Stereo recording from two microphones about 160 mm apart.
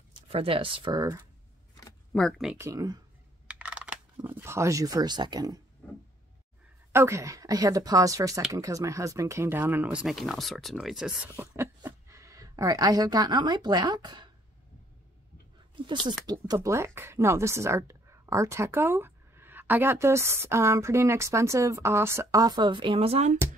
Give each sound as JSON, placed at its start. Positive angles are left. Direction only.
{"t": 0.1, "sound": "speech", "side_deg": -35}
{"t": 2.1, "sound": "speech", "side_deg": 0}
{"t": 2.5, "sound": "speech", "side_deg": -20}
{"t": 3.4, "sound": "computer keyboard", "side_deg": -10}
{"t": 4.4, "sound": "speech", "side_deg": -15}
{"t": 6.9, "sound": "speech", "side_deg": -15}
{"t": 11.5, "sound": "a woman's voice", "side_deg": -15}
{"t": 15.7, "sound": "speech", "side_deg": -30}